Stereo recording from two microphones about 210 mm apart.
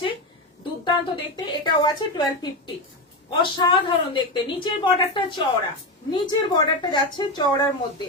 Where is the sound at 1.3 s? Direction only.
20° left (ahead or behind).